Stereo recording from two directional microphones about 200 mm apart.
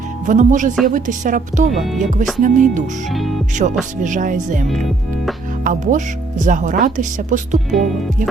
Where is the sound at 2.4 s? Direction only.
40° right (ahead or behind).